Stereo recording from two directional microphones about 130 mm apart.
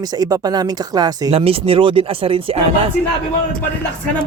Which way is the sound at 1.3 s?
45° right (ahead or behind).